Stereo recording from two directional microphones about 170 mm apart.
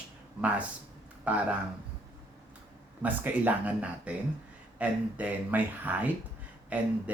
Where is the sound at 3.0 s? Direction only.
10° right (ahead or behind).